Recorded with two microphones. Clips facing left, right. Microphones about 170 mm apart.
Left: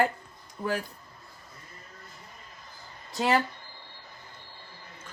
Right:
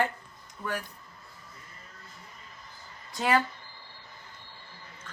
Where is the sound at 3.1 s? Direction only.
25° left (ahead or behind).